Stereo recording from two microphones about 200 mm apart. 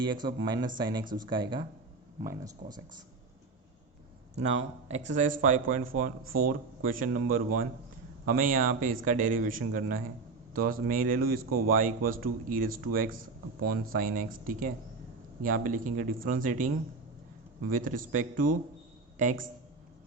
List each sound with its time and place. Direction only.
0.4 s speech: 20° right (ahead or behind)
1.0 s a man's voice: 40° right (ahead or behind)
1.3 s speech: 25° right (ahead or behind)
4.9 s a man's voice: 35° right (ahead or behind)
17.7 s a man's voice: 45° right (ahead or behind)